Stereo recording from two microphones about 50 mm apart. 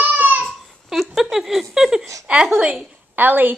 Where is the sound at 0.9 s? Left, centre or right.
Centre.